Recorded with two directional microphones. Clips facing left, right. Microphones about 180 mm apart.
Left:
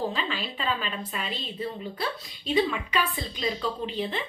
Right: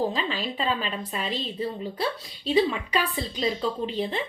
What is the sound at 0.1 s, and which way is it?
A woman's voice, 35° right (ahead or behind).